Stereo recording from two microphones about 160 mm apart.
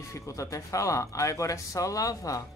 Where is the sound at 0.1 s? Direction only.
20° left (ahead or behind).